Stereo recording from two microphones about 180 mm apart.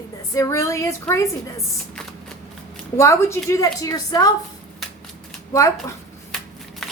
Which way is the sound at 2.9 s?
15° left (ahead or behind).